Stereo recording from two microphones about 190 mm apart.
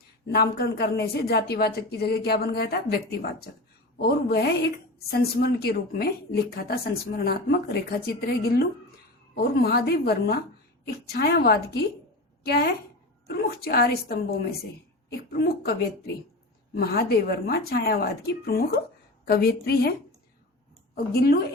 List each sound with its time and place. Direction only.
0.3 s a woman's voice: 55° left (ahead or behind)
16.7 s a woman's voice: 55° left (ahead or behind)
20.9 s a woman's voice: 55° left (ahead or behind)